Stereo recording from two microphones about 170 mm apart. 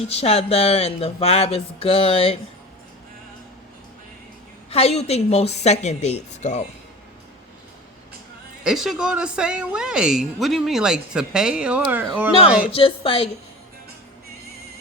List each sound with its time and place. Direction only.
0.1 s speech: 35° left (ahead or behind)
4.7 s speech: 35° left (ahead or behind)
8.6 s a woman's voice: centre (ahead or behind)
12.7 s speech: 30° left (ahead or behind)